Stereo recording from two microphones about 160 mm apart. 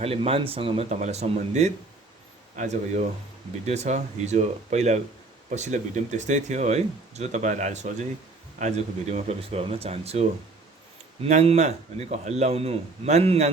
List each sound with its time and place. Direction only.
0.0 s speech: 35° right (ahead or behind)